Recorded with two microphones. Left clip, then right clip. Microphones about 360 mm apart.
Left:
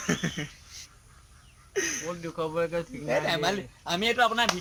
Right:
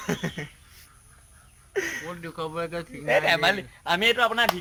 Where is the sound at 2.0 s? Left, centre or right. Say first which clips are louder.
Left 1 dB; centre.